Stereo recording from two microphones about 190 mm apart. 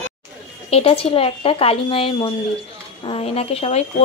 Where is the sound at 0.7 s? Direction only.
30° left (ahead or behind).